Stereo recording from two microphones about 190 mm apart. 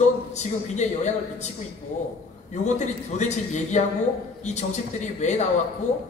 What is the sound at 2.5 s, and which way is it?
A man's voice, 40° left (ahead or behind).